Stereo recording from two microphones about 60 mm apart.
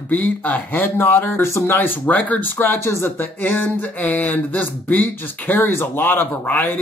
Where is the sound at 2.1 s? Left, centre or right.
Left.